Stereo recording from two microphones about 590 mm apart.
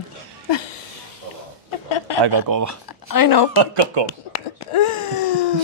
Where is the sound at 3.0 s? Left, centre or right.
Left.